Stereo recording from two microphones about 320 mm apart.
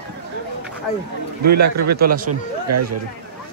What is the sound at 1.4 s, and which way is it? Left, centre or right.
Speech, right.